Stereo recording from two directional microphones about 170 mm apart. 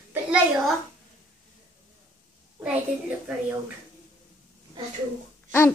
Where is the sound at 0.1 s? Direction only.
5° right (ahead or behind).